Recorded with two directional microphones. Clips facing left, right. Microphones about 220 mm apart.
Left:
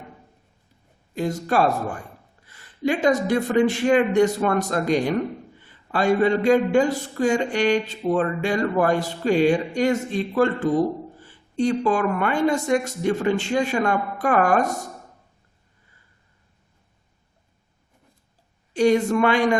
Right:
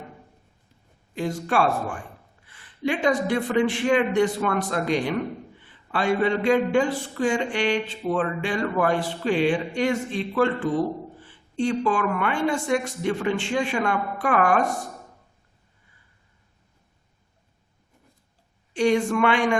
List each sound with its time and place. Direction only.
1.1 s speech: 40° left (ahead or behind)
18.7 s speech: 40° left (ahead or behind)